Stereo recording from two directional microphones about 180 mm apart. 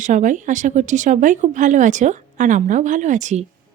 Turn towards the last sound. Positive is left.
turn(degrees=-40)  # may be behind; listen again after turning